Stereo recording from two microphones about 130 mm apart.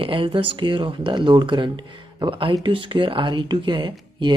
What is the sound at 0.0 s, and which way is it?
Speech, 40° right (ahead or behind).